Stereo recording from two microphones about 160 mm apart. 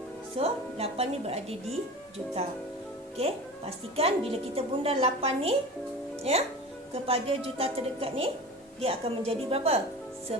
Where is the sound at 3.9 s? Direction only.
40° right (ahead or behind).